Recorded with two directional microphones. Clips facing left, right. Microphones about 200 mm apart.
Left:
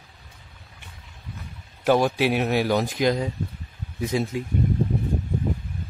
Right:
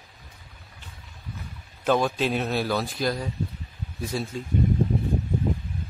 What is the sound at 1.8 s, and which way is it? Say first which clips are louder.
Speech: left 3 dB; 10° left (ahead or behind).